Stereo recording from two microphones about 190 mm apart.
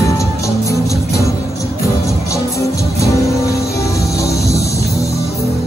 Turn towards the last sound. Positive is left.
turn(degrees=15)  # may be behind; listen again after turning